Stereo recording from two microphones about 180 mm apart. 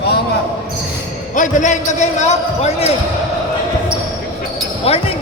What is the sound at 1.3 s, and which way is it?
Speech, 45° left (ahead or behind).